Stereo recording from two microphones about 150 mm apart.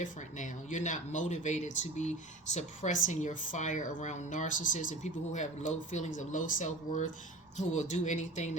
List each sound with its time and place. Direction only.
0.0 s speech: 60° left (ahead or behind)